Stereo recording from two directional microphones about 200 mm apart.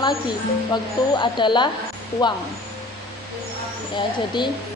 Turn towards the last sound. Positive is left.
turn(degrees=20)  # may be behind; listen again after turning